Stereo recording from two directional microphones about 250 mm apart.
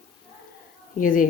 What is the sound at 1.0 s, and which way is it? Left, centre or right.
Speech, left.